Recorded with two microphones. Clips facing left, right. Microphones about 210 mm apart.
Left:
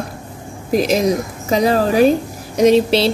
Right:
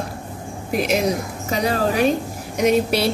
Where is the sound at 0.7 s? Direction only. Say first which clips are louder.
Left 5 dB; 40° left (ahead or behind).